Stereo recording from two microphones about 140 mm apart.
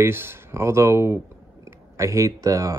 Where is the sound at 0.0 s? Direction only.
15° right (ahead or behind).